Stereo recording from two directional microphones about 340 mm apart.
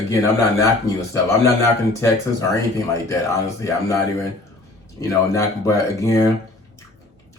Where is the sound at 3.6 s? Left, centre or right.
Centre.